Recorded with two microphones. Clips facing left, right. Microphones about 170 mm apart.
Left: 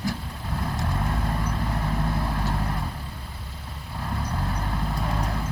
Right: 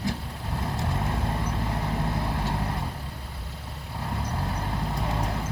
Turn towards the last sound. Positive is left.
turn(degrees=-20)  # may be behind; listen again after turning